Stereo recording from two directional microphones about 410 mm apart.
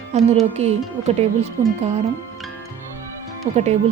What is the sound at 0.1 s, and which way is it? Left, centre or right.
A woman's voice, centre.